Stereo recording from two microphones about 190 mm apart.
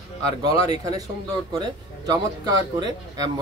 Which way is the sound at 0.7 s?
20° right (ahead or behind).